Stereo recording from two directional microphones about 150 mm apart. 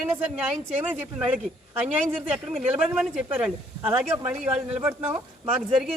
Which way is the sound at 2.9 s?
10° right (ahead or behind).